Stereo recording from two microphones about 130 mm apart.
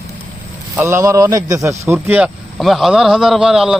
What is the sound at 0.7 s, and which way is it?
Speech, 20° right (ahead or behind).